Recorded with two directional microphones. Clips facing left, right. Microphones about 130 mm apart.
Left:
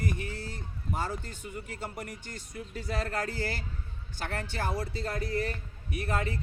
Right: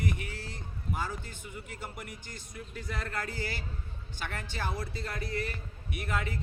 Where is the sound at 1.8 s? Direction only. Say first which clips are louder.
Left 4 dB; 35° left (ahead or behind).